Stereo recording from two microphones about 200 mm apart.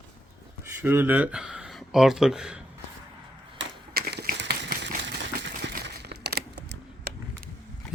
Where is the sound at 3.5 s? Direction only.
50° right (ahead or behind).